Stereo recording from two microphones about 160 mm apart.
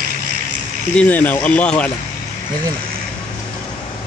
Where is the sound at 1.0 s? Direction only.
10° left (ahead or behind).